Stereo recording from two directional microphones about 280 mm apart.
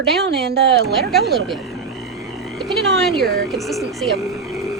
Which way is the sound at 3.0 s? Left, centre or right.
Centre.